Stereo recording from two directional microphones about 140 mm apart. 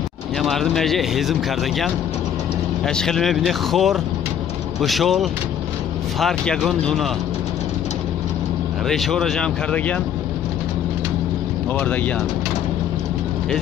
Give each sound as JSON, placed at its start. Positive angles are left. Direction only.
{"t": 0.4, "sound": "speech", "side_deg": 0}
{"t": 2.9, "sound": "speech", "side_deg": 5}
{"t": 8.8, "sound": "speech", "side_deg": 0}
{"t": 11.7, "sound": "speech", "side_deg": 10}